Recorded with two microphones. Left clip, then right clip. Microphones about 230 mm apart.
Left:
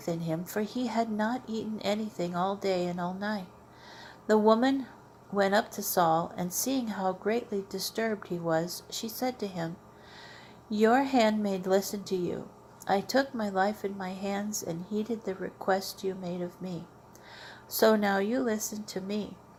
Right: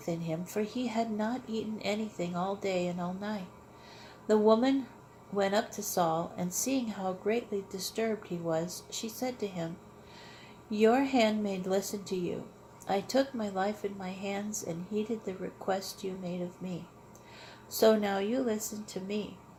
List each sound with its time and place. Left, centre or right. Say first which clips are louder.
0.0 s a woman's voice: left 2 dB; left
10.7 s a woman's voice: left 2 dB; left
17.4 s a woman's voice: left 1 dB; left